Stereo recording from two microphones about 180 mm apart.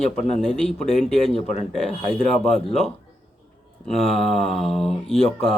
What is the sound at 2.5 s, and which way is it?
Speech, centre (ahead or behind).